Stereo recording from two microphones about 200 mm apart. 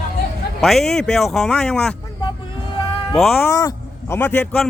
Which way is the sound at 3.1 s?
Centre (ahead or behind).